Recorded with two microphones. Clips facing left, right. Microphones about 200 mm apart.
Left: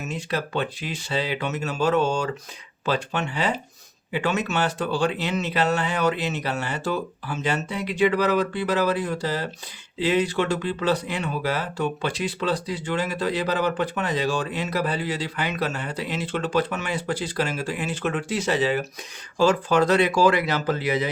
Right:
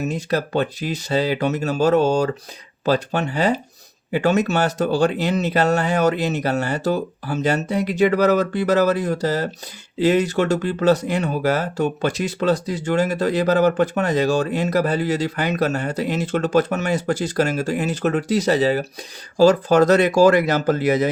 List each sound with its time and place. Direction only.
0.0 s speech: 40° right (ahead or behind)